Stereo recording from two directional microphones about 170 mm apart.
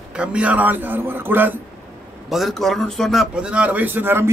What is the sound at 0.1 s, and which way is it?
A man's voice, 5° right (ahead or behind).